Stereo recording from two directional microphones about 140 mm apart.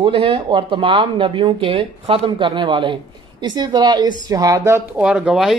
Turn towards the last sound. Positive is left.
turn(degrees=-5)  # may be behind; listen again after turning